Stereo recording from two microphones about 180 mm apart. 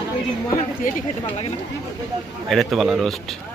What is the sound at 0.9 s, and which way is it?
Speech, 50° left (ahead or behind).